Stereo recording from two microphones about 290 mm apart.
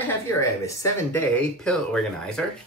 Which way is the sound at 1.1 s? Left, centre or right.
Centre.